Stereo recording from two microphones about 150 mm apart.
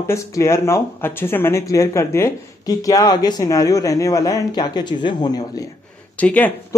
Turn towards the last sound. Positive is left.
turn(degrees=10)  # may be behind; listen again after turning